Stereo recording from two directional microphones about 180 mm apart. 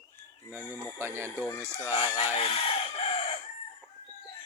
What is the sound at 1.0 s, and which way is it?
Speech, 15° right (ahead or behind).